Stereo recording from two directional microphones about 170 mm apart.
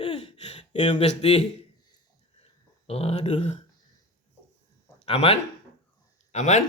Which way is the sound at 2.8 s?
35° left (ahead or behind).